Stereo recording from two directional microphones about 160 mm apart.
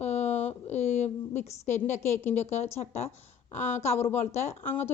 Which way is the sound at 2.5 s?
45° left (ahead or behind).